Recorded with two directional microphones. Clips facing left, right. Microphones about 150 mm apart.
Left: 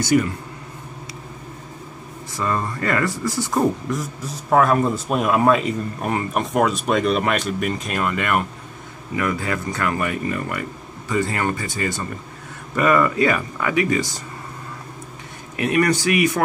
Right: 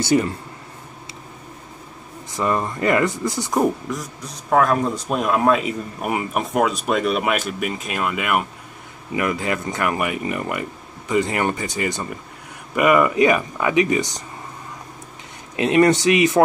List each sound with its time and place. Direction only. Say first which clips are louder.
0.0 s speech: even; 25° right (ahead or behind)
2.3 s speech: right 2 dB; 20° right (ahead or behind)
3.9 s a man's voice: left 3 dB; centre (ahead or behind)
9.1 s speech: right 1 dB; 20° right (ahead or behind)
15.5 s speech: right 4 dB; 20° right (ahead or behind)